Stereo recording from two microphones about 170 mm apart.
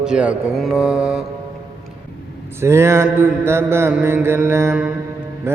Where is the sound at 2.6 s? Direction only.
15° right (ahead or behind).